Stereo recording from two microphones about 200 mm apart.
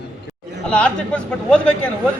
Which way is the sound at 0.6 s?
5° left (ahead or behind).